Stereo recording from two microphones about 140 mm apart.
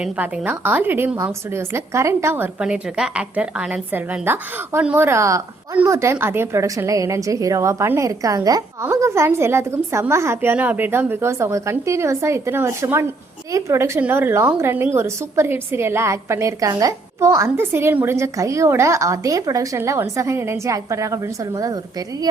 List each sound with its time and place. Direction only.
0.0 s a woman's voice: 10° right (ahead or behind)